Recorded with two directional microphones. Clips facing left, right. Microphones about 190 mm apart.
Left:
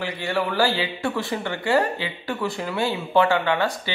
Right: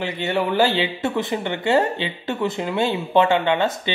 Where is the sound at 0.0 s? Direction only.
20° right (ahead or behind).